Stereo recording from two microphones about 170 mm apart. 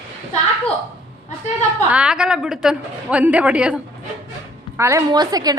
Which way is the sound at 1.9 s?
5° right (ahead or behind).